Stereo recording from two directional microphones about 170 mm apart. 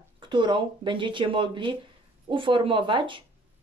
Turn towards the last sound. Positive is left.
turn(degrees=-30)  # may be behind; listen again after turning